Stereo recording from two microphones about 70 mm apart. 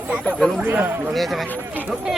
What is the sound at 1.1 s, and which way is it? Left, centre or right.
Speech, centre.